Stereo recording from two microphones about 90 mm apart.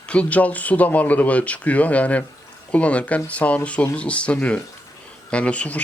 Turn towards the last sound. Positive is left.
turn(degrees=15)  # may be behind; listen again after turning